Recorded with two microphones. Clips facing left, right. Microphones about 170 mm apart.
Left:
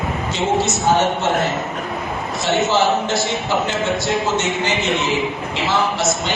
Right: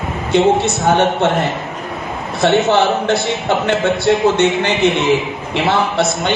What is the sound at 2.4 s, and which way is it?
A man's voice, 60° right (ahead or behind).